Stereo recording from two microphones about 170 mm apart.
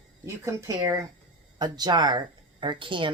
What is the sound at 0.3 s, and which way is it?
Speech, 15° right (ahead or behind).